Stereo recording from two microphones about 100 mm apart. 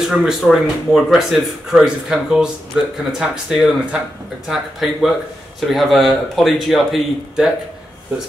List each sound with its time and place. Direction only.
0.0 s speech: 5° right (ahead or behind)